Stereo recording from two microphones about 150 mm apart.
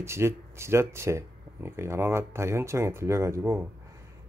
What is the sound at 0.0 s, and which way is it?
Speech, 15° right (ahead or behind).